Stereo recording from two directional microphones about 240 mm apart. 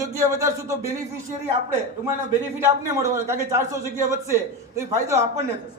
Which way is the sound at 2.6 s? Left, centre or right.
Centre.